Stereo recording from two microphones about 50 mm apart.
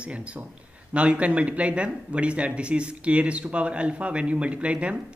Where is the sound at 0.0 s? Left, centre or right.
Right.